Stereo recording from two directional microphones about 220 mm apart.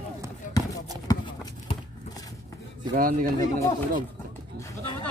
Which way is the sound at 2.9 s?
40° right (ahead or behind).